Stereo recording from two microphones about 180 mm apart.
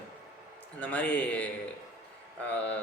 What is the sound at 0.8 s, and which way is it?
Speech, 10° left (ahead or behind).